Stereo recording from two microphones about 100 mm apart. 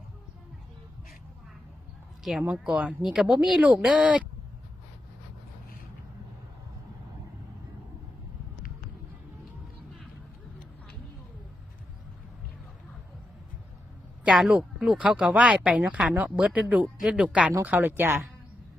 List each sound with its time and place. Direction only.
2.5 s speech: 10° right (ahead or behind)
14.3 s speech: 10° right (ahead or behind)
17.5 s speech: 20° right (ahead or behind)